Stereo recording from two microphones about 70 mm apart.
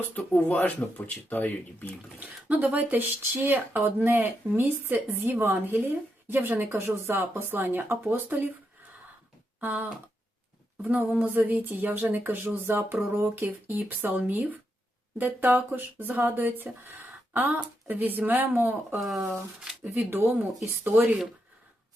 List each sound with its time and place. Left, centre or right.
0.1 s speech: centre
1.9 s speech: right
6.7 s speech: right
9.6 s a sound: right
10.8 s speech: right
18.9 s speech: centre
19.8 s speech: right